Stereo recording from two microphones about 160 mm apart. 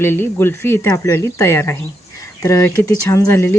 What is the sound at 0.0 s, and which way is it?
Speech, 15° left (ahead or behind).